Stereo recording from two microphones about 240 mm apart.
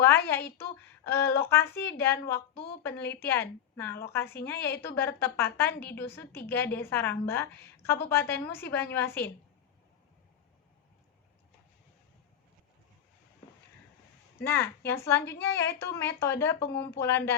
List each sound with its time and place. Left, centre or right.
0.5 s a woman's voice: centre
14.3 s a woman's voice: centre
16.6 s speech: left
17.0 s a woman's voice: centre